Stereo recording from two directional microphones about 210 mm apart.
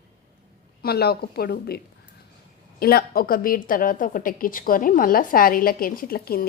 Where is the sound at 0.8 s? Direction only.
50° left (ahead or behind).